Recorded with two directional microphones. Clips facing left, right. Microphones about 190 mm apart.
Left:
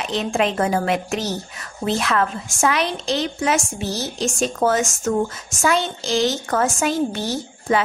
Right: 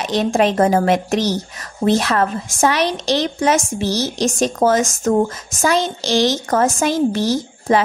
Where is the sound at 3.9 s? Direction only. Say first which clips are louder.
Right 5 dB; 90° right.